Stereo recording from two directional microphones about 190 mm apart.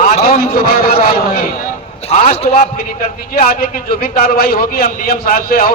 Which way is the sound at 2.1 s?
35° left (ahead or behind).